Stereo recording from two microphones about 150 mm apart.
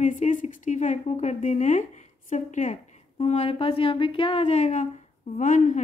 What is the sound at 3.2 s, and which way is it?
A woman's voice, 40° left (ahead or behind).